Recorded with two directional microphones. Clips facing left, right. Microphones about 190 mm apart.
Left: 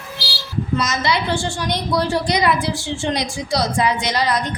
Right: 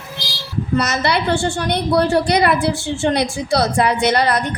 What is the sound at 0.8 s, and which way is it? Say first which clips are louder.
A woman's voice: right 4 dB; 60° right (ahead or behind).